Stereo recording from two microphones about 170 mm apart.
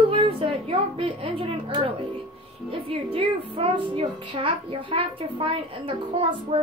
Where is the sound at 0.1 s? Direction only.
30° right (ahead or behind).